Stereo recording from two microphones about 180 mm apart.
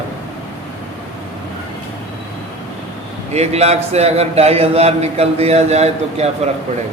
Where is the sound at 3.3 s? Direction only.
35° right (ahead or behind).